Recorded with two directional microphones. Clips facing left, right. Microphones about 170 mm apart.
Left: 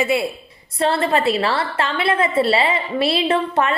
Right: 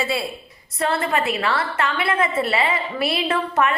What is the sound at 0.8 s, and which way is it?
A woman's voice, 30° left (ahead or behind).